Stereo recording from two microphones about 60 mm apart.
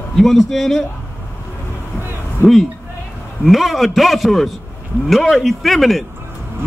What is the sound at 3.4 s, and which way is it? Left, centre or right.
A man's voice, centre.